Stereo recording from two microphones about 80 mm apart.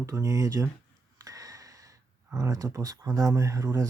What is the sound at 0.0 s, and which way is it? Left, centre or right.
Speech, right.